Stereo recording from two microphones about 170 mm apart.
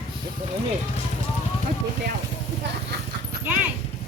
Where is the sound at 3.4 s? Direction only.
10° right (ahead or behind).